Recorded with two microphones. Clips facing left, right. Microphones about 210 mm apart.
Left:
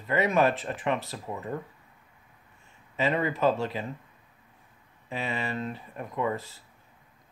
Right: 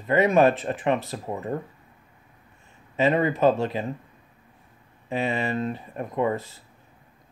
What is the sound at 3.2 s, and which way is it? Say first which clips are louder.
Speech: right 5 dB; 20° right (ahead or behind).